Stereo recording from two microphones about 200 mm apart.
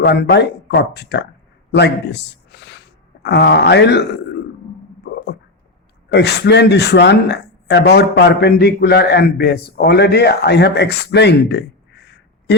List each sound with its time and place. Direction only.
0.0 s speech: 55° left (ahead or behind)
6.1 s speech: 55° left (ahead or behind)